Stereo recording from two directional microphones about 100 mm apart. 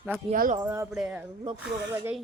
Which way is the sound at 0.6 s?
20° right (ahead or behind).